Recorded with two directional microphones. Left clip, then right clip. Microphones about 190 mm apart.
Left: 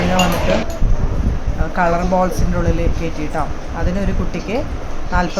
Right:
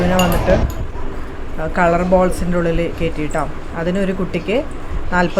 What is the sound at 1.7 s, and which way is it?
Speech, 15° right (ahead or behind).